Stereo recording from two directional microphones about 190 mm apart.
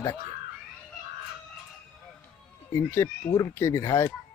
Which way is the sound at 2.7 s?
15° left (ahead or behind).